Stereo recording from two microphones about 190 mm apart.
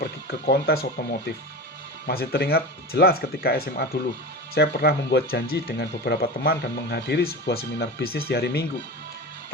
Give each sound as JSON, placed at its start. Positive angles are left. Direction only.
{"t": 0.0, "sound": "speech", "side_deg": 55}
{"t": 2.0, "sound": "speech", "side_deg": 55}